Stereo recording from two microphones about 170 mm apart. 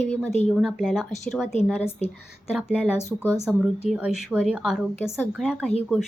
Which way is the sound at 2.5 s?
5° right (ahead or behind).